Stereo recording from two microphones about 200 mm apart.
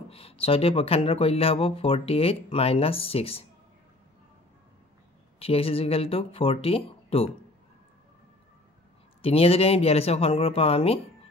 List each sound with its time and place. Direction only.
0.1 s speech: 30° left (ahead or behind)
5.4 s speech: 30° left (ahead or behind)
9.2 s speech: 30° left (ahead or behind)